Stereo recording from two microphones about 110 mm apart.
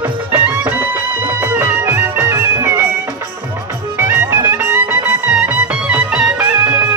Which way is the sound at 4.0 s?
20° right (ahead or behind).